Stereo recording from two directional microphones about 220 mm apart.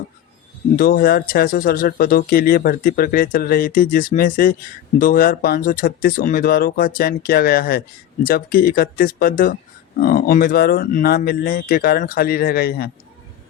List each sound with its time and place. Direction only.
0.8 s speech: 45° left (ahead or behind)